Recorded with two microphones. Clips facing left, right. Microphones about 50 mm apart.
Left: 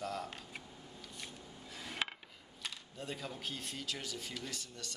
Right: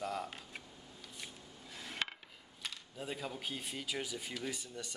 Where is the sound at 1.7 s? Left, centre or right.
Centre.